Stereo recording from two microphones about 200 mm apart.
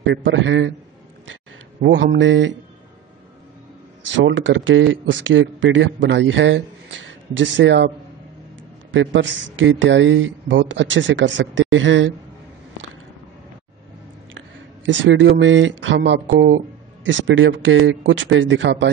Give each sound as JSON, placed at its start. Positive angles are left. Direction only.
{"t": 0.0, "sound": "a man's voice", "side_deg": -60}
{"t": 1.8, "sound": "a man's voice", "side_deg": -60}
{"t": 4.3, "sound": "speech", "side_deg": -70}
{"t": 8.9, "sound": "speech", "side_deg": -70}
{"t": 14.9, "sound": "speech", "side_deg": -65}